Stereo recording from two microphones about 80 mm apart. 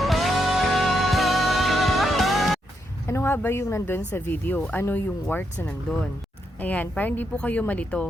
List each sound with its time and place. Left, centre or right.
0.0 s music: centre
3.1 s speech: left